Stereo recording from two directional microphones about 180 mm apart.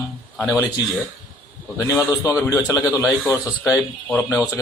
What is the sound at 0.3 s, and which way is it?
Speech, 20° left (ahead or behind).